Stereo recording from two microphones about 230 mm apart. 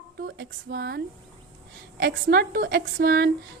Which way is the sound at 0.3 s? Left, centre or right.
Right.